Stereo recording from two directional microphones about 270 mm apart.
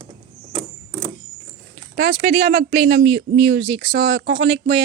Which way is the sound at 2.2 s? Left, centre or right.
Right.